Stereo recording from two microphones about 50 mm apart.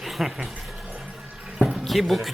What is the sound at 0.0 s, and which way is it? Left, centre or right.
Speech, centre.